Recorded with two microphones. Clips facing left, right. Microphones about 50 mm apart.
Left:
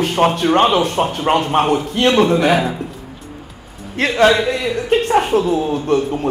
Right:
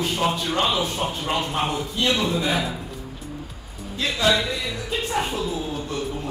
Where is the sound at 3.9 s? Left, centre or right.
Left.